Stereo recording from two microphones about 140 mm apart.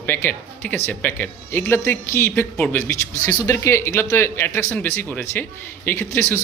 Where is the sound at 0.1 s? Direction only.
15° left (ahead or behind).